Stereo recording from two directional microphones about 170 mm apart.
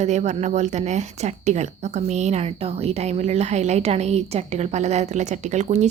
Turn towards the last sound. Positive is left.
turn(degrees=-45)  # may be behind; listen again after turning